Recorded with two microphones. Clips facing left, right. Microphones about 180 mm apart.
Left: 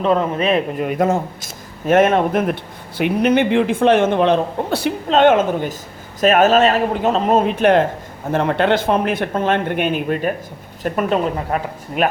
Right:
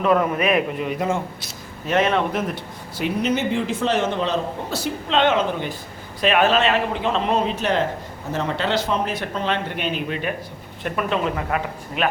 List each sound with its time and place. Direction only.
0.0 s a man's voice: 30° left (ahead or behind)
0.8 s a man's voice: 50° left (ahead or behind)
5.0 s speech: 45° left (ahead or behind)